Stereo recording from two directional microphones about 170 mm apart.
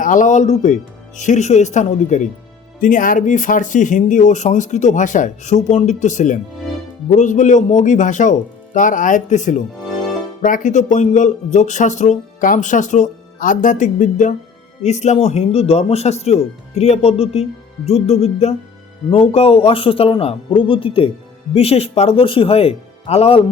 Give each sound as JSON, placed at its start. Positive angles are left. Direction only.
{"t": 0.0, "sound": "speech", "side_deg": 50}